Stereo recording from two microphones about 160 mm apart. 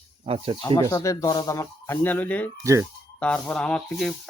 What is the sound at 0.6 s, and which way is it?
A man's voice, 20° left (ahead or behind).